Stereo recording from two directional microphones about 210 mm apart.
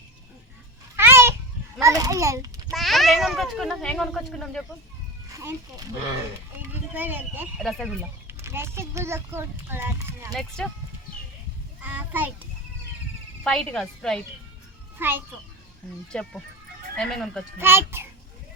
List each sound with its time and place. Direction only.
0.9 s babbling: 10° right (ahead or behind)
1.8 s a child's voice: 15° right (ahead or behind)
2.6 s a child's voice: centre (ahead or behind)
5.3 s a child's voice: 15° right (ahead or behind)
6.9 s a child's voice: 10° right (ahead or behind)
8.3 s a child's voice: 10° right (ahead or behind)
10.6 s a child's voice: centre (ahead or behind)
11.8 s a child's voice: 10° right (ahead or behind)
13.4 s a child's voice: 5° left (ahead or behind)
14.9 s a child's voice: 10° right (ahead or behind)
16.1 s a child's voice: 5° left (ahead or behind)
17.6 s a child's voice: 10° right (ahead or behind)